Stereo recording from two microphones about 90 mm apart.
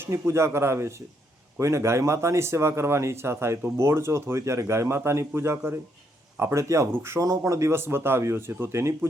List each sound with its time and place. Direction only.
0.0 s speech: 30° right (ahead or behind)